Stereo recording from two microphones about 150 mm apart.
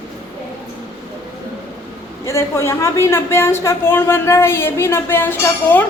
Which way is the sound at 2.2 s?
20° left (ahead or behind).